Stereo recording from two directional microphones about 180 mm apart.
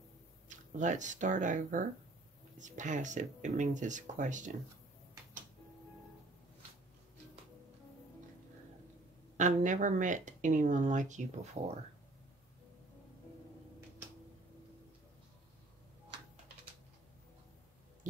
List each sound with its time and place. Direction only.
0.5 s speech: 45° right (ahead or behind)
9.4 s speech: 40° right (ahead or behind)